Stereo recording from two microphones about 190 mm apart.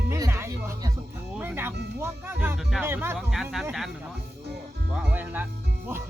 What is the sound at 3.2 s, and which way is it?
Speech, centre (ahead or behind).